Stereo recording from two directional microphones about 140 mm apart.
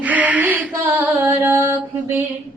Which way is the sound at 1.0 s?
15° right (ahead or behind).